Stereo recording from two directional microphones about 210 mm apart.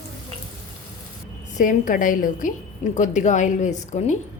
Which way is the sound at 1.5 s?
40° left (ahead or behind).